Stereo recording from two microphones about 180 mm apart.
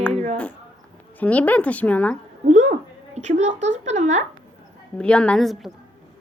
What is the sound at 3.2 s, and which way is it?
Speech, 40° right (ahead or behind).